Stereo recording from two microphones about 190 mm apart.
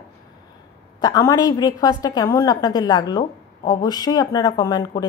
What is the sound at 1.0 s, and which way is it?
Speech, 20° left (ahead or behind).